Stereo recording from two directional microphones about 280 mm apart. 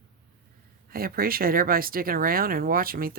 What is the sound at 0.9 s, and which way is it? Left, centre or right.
Speech, right.